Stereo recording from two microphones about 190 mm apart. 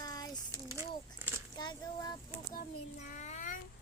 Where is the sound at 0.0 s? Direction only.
20° left (ahead or behind).